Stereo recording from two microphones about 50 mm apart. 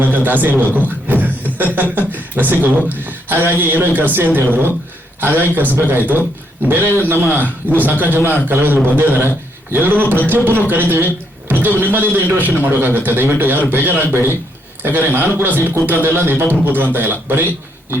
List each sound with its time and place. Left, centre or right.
0.0 s a man's voice: right
6.8 s a man's voice: left
7.1 s a man's voice: right
14.8 s a man's voice: right